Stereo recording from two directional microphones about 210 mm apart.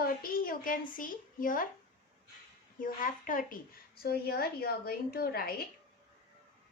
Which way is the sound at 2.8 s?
40° left (ahead or behind).